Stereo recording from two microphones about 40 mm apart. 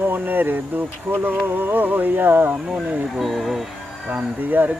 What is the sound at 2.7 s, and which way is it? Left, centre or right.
Speech, centre.